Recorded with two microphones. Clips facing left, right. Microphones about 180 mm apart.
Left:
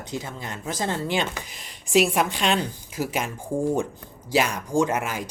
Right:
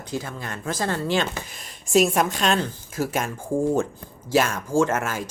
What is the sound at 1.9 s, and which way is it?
Speech, 45° right (ahead or behind).